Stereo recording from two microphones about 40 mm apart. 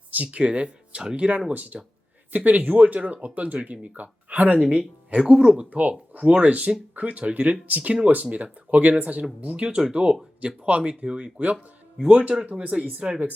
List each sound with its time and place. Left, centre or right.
0.3 s speech: right
4.8 s speech: centre; by 9.6 s right
9.6 s speech: right